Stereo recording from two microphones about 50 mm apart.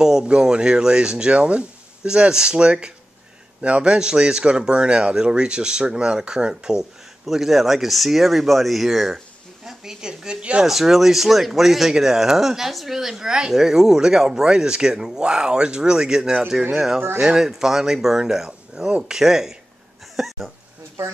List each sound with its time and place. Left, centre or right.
0.0 s a woman's voice: centre
10.6 s speech: centre